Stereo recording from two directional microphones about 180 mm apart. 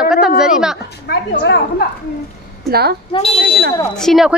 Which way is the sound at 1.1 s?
65° left (ahead or behind).